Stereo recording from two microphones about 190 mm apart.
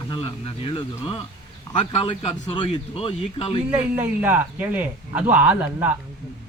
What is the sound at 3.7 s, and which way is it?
Speech, 10° right (ahead or behind).